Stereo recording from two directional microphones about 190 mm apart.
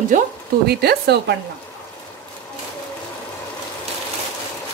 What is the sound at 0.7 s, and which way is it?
Speech, 55° right (ahead or behind).